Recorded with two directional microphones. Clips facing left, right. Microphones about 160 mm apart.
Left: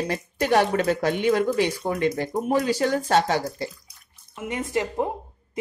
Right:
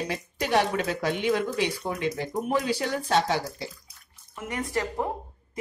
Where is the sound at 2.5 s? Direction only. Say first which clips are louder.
Left 5 dB; 40° left (ahead or behind).